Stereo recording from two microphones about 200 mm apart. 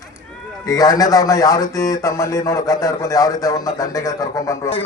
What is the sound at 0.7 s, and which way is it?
A man's voice, 20° left (ahead or behind).